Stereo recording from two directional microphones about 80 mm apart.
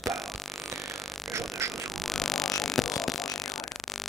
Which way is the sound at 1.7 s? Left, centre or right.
Centre.